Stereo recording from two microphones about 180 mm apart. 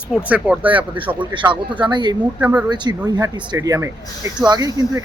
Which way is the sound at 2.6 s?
25° right (ahead or behind).